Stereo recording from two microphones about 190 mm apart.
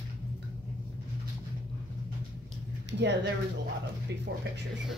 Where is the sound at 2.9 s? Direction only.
65° right (ahead or behind).